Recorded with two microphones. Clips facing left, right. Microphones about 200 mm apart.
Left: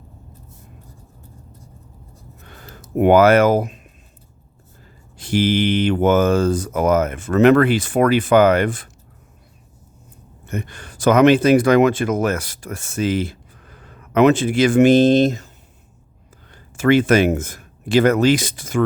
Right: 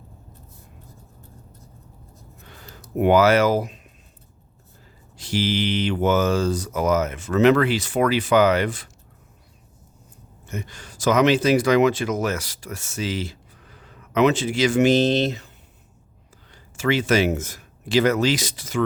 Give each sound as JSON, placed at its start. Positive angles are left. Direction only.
{"t": 2.5, "sound": "a sound", "side_deg": 50}
{"t": 3.0, "sound": "speech", "side_deg": 55}
{"t": 5.1, "sound": "speech", "side_deg": 55}
{"t": 10.4, "sound": "speech", "side_deg": 60}
{"t": 16.5, "sound": "speech", "side_deg": 55}